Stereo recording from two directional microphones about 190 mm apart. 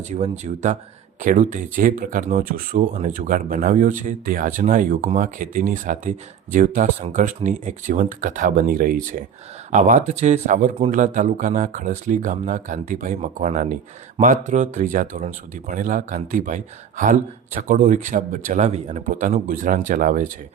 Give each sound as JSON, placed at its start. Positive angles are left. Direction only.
{"t": 0.1, "sound": "speech", "side_deg": -35}